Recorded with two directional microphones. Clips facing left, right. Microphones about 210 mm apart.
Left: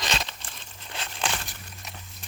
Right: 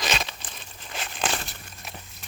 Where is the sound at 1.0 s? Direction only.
20° right (ahead or behind).